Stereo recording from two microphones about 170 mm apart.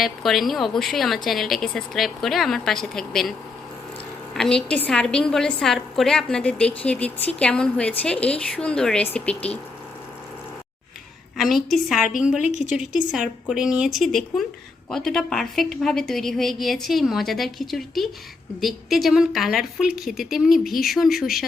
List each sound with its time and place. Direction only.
0.0 s a woman's voice: centre (ahead or behind)
4.4 s a woman's voice: 5° left (ahead or behind)
11.3 s a woman's voice: centre (ahead or behind)
12.5 s a woman's voice: 40° left (ahead or behind)
12.7 s a woman's voice: 5° right (ahead or behind)